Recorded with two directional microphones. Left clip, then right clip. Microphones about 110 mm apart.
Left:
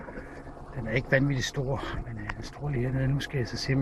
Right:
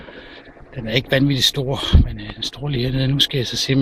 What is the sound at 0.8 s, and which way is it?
Speech, 40° right (ahead or behind).